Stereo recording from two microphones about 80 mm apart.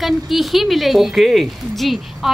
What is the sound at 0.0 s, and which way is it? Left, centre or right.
A woman's voice, centre.